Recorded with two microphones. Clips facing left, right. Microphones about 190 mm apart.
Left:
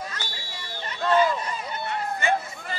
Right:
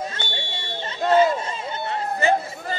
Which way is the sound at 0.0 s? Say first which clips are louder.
Right 6 dB; 25° right (ahead or behind).